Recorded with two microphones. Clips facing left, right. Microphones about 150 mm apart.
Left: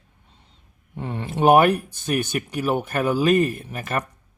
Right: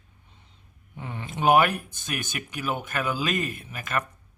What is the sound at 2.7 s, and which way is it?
Speech, 40° left (ahead or behind).